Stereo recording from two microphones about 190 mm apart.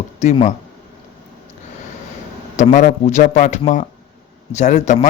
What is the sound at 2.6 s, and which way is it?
Speech, 40° left (ahead or behind).